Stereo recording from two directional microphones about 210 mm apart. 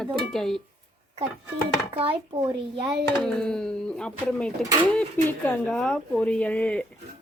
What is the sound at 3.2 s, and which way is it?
Speech, 5° left (ahead or behind).